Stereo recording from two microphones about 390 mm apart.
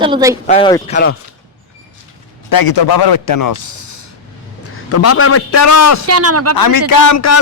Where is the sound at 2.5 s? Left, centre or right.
Left.